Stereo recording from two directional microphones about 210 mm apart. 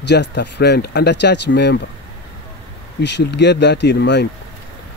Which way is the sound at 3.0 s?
55° left (ahead or behind).